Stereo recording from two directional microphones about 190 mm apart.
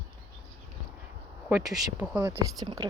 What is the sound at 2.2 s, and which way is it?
Speech, 20° right (ahead or behind).